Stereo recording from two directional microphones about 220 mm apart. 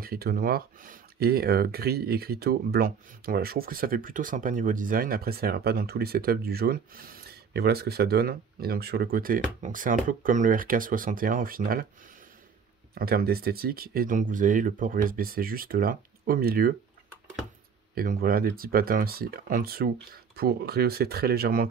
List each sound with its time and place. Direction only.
0.0 s speech: 40° right (ahead or behind)
12.9 s speech: 45° right (ahead or behind)
17.9 s speech: 40° right (ahead or behind)